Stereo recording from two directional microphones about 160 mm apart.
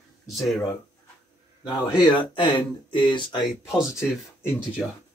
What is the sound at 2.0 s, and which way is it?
Speech, 30° left (ahead or behind).